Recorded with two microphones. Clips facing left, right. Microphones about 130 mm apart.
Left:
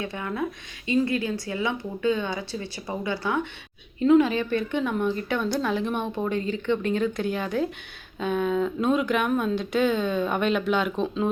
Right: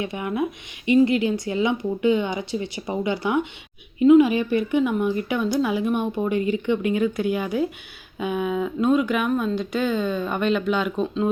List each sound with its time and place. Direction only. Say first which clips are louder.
0.0 s speech: right 4 dB; 15° right (ahead or behind); by 11.3 s centre (ahead or behind)